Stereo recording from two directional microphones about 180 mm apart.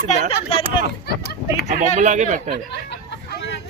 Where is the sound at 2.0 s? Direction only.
45° right (ahead or behind).